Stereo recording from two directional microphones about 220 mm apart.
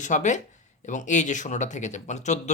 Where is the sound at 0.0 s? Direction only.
35° left (ahead or behind).